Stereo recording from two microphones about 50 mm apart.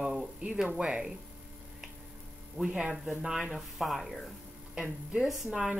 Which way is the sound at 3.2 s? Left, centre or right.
Centre.